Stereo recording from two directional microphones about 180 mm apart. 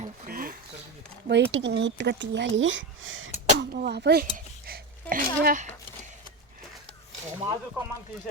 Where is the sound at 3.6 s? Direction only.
60° right (ahead or behind).